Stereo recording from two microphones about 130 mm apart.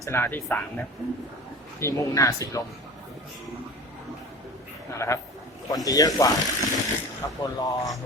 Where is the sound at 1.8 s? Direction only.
25° left (ahead or behind).